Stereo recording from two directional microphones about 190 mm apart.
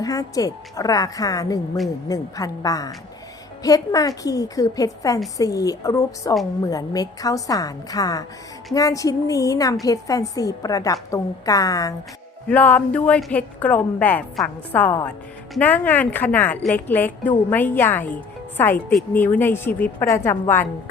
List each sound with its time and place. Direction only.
0.0 s a woman's voice: 20° left (ahead or behind)
12.5 s a woman's voice: 10° left (ahead or behind)